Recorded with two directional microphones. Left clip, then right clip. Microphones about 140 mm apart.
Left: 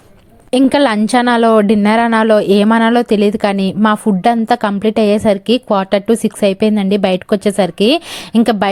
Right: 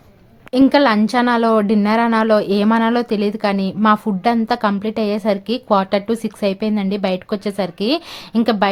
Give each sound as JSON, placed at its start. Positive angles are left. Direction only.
{"t": 0.7, "sound": "a woman's voice", "side_deg": 55}
{"t": 3.8, "sound": "a woman's voice", "side_deg": 35}